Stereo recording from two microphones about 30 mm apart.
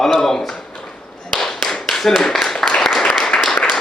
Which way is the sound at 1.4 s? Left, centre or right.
Centre.